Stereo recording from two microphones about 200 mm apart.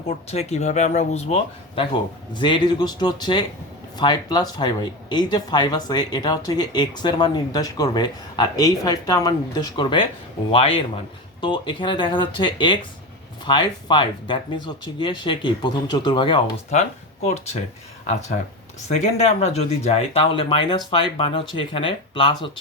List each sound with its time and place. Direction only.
0.3 s speech: 30° left (ahead or behind)
17.2 s speech: 35° left (ahead or behind)